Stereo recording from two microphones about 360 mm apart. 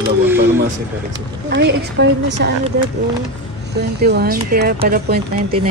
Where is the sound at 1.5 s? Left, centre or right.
Right.